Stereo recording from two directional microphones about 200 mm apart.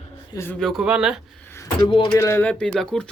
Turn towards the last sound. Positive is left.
turn(degrees=5)  # may be behind; listen again after turning